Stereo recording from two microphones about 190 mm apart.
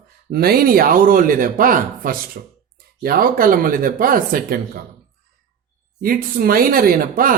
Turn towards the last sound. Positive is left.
turn(degrees=-50)  # may be behind; listen again after turning